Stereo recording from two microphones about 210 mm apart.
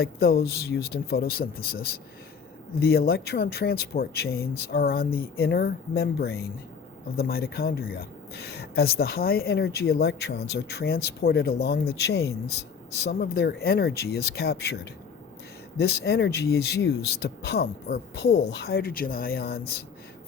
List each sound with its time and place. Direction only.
0.0 s speech: 45° left (ahead or behind)
15.8 s speech: 50° left (ahead or behind)